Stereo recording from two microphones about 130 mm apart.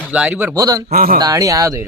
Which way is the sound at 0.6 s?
25° right (ahead or behind).